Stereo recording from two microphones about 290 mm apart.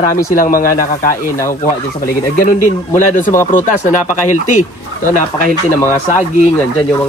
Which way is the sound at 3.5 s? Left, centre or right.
Left.